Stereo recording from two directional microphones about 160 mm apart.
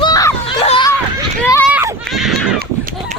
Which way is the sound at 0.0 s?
20° left (ahead or behind).